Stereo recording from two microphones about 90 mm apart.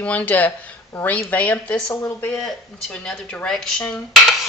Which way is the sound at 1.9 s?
30° left (ahead or behind).